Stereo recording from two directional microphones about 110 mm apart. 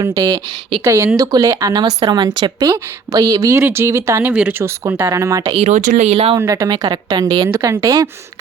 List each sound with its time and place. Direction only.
0.0 s speech: 30° right (ahead or behind)
4.3 s speech: 10° right (ahead or behind)
4.6 s speech: 25° right (ahead or behind)
5.5 s speech: 90° right
6.4 s speech: 20° right (ahead or behind)
6.7 s speech: 40° right (ahead or behind)